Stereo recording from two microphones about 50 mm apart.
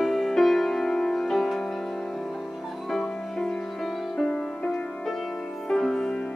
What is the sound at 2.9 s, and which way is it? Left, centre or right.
Music, centre.